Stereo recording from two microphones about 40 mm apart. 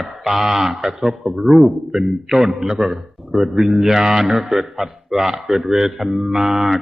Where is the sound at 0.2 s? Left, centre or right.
Centre.